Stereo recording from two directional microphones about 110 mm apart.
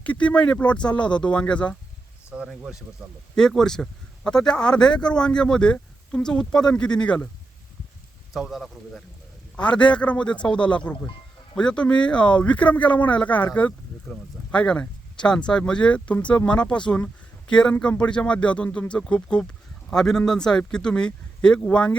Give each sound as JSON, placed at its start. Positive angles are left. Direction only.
{"t": 0.0, "sound": "speech", "side_deg": 10}
{"t": 2.3, "sound": "speech", "side_deg": -10}
{"t": 3.3, "sound": "speech", "side_deg": 5}
{"t": 8.3, "sound": "speech", "side_deg": 0}